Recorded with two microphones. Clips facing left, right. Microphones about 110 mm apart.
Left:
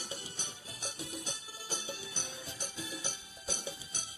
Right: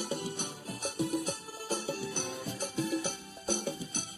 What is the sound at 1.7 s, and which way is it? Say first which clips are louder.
Jingle bell: right 8 dB; 65° right (ahead or behind).